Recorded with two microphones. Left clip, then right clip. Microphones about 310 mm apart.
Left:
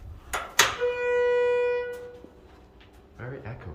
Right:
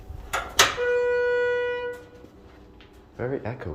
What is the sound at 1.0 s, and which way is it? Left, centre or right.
Wind instrument, centre.